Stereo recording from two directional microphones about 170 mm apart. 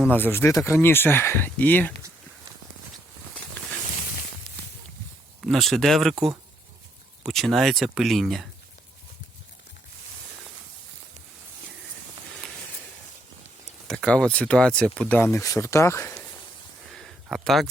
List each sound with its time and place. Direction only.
0.1 s speech: 10° left (ahead or behind)
5.4 s speech: centre (ahead or behind)
7.3 s speech: centre (ahead or behind)
13.8 s speech: 5° left (ahead or behind)
15.2 s speech: 15° left (ahead or behind)
16.9 s a sound: centre (ahead or behind)